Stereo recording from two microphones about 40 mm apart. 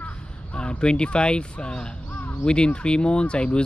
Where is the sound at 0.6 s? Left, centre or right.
Left.